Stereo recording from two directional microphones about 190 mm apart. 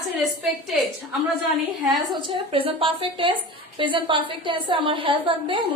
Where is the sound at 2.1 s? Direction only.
25° right (ahead or behind).